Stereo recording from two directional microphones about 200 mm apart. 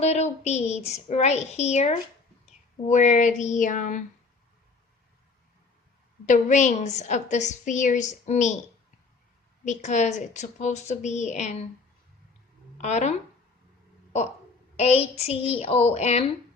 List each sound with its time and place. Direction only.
0.0 s a woman's voice: 35° left (ahead or behind)
6.2 s a woman's voice: 35° left (ahead or behind)
9.6 s a woman's voice: 35° left (ahead or behind)
12.8 s a woman's voice: 35° left (ahead or behind)
14.8 s a woman's voice: 30° left (ahead or behind)